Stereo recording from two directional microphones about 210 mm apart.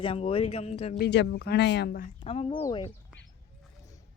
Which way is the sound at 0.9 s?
50° left (ahead or behind).